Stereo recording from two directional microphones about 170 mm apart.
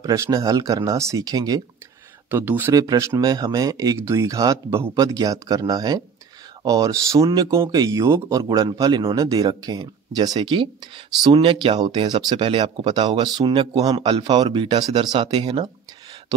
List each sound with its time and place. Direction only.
0.0 s speech: 20° right (ahead or behind)
2.3 s speech: 10° right (ahead or behind); by 15.7 s 30° right (ahead or behind)